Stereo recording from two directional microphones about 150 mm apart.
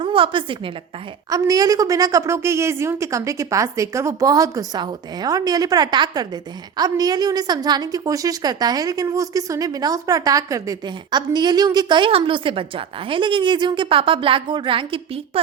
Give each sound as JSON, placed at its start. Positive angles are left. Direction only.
{"t": 0.0, "sound": "a woman's voice", "side_deg": -35}
{"t": 1.3, "sound": "a woman's voice", "side_deg": -25}